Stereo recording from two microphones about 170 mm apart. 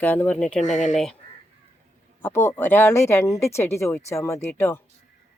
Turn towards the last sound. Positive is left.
turn(degrees=15)  # may be behind; listen again after turning